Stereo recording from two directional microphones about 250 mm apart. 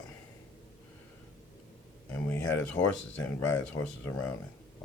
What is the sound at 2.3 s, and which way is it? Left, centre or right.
Speech, centre.